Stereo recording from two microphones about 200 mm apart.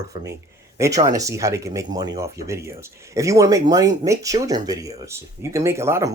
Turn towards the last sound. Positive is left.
turn(degrees=-15)  # may be behind; listen again after turning